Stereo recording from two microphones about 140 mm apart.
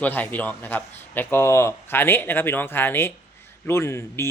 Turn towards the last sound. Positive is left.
turn(degrees=20)  # may be behind; listen again after turning